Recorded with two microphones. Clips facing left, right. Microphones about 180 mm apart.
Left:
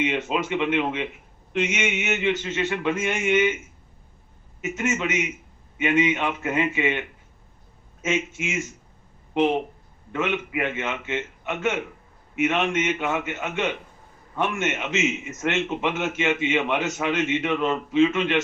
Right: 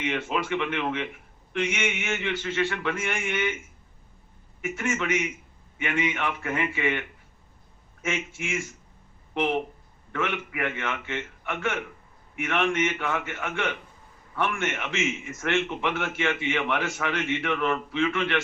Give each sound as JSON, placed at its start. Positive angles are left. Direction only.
{"t": 0.0, "sound": "a man's voice", "side_deg": 20}
{"t": 4.6, "sound": "a man's voice", "side_deg": 20}
{"t": 8.0, "sound": "a man's voice", "side_deg": 20}